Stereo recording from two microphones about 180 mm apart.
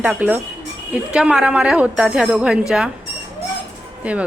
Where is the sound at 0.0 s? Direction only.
10° right (ahead or behind).